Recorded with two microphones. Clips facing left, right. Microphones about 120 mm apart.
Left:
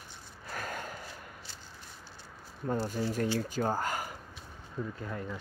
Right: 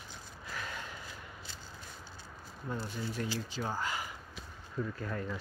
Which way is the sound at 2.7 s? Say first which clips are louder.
Left 7 dB; 40° left (ahead or behind).